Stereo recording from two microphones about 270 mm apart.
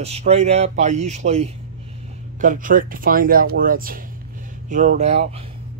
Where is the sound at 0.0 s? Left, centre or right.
Right.